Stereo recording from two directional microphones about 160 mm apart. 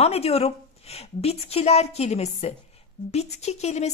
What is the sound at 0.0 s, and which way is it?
A woman's voice, 40° left (ahead or behind).